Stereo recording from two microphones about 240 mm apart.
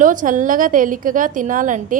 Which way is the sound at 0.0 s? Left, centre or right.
Right.